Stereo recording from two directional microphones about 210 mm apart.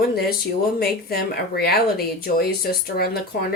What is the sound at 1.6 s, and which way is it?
Speech, 45° left (ahead or behind).